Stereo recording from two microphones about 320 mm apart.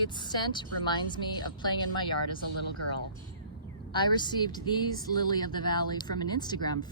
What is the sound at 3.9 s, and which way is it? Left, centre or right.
A woman's voice, centre.